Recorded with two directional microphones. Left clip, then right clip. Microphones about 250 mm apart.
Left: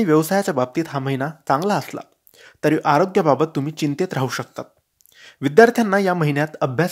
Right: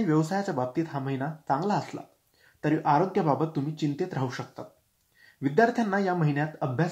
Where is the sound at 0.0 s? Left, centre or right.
Left.